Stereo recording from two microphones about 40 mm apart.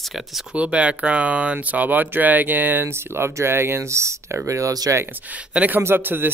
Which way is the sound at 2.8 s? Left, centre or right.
Right.